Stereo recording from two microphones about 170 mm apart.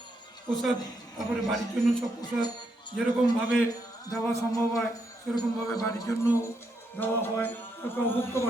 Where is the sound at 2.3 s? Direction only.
5° right (ahead or behind).